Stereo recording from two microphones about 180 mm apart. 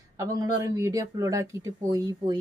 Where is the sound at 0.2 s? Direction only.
20° right (ahead or behind).